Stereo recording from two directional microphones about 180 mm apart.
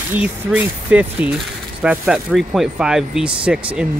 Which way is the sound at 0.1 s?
10° right (ahead or behind).